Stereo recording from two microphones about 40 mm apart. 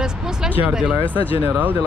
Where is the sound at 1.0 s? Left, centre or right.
Left.